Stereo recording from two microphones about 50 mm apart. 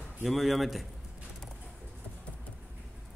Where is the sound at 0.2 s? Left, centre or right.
Centre.